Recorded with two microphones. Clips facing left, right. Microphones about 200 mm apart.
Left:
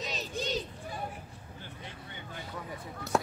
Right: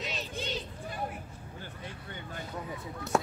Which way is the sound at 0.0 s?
40° left (ahead or behind).